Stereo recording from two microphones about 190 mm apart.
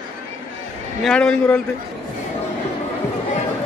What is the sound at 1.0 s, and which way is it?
Speech, 5° left (ahead or behind).